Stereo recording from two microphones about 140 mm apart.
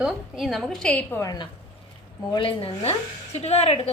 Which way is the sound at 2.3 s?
40° left (ahead or behind).